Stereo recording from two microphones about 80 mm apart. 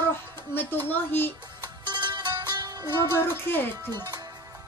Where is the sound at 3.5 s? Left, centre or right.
Left.